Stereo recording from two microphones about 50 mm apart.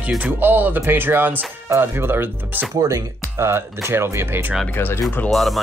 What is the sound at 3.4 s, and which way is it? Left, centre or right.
Speech, right.